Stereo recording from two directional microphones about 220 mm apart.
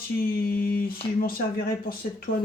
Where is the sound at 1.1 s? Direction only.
40° left (ahead or behind).